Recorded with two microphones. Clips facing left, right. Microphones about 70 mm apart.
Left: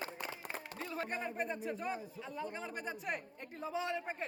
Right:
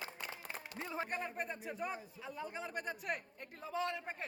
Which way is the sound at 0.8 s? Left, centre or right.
Centre.